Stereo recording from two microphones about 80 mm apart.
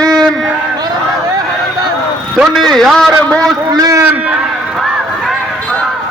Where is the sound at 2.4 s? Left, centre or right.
Centre.